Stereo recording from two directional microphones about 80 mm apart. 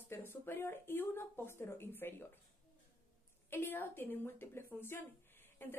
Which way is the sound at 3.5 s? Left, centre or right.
Left.